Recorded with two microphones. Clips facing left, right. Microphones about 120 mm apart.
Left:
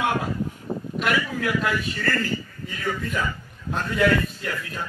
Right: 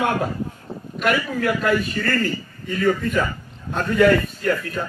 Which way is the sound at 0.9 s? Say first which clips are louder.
Right 4 dB; 45° right (ahead or behind).